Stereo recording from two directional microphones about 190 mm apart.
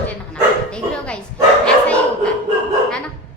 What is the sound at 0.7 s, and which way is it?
Bow-wow, 5° left (ahead or behind).